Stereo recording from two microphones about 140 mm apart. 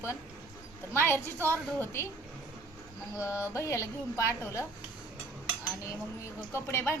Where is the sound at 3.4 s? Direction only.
20° left (ahead or behind).